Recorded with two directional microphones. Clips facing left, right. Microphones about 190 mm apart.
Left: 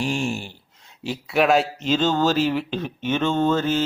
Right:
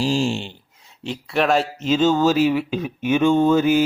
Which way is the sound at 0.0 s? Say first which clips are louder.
Right 4 dB; 30° right (ahead or behind).